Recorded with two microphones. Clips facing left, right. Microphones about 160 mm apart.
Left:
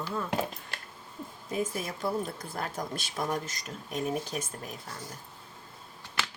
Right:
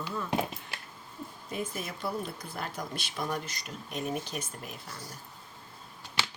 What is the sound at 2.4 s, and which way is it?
Speech, 45° left (ahead or behind).